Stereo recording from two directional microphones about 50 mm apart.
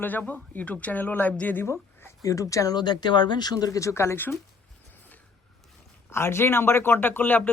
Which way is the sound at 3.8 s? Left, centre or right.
Left.